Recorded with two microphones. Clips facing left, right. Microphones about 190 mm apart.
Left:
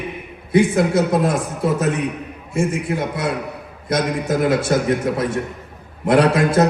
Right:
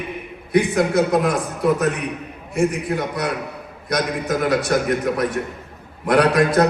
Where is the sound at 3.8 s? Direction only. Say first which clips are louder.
Left 2 dB; 25° left (ahead or behind).